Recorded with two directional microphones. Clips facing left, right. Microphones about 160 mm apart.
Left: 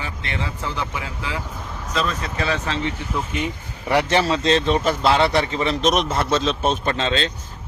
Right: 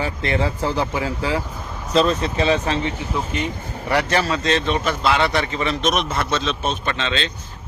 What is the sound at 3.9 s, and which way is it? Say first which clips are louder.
A man's voice: left 1 dB; 20° left (ahead or behind).